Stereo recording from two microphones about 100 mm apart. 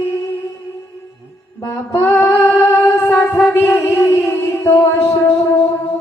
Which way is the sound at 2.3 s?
10° left (ahead or behind).